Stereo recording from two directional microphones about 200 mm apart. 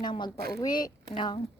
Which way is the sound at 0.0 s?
20° left (ahead or behind).